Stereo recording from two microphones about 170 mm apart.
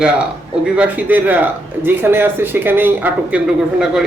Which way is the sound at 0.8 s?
10° right (ahead or behind).